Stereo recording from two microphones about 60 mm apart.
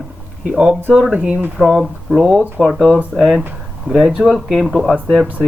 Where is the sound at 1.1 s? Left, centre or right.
Centre.